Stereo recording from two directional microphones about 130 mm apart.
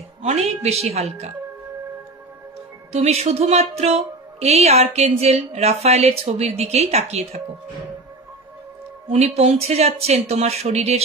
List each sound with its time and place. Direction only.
0.2 s speech: 55° right (ahead or behind)
2.9 s speech: 55° right (ahead or behind)
9.1 s speech: 55° right (ahead or behind)